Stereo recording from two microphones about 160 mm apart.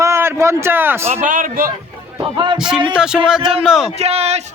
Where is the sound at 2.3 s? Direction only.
30° right (ahead or behind).